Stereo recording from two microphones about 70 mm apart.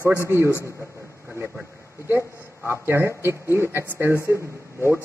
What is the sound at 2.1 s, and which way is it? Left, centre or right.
A man's voice, right.